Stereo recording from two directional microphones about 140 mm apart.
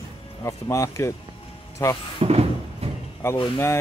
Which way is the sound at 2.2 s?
45° right (ahead or behind).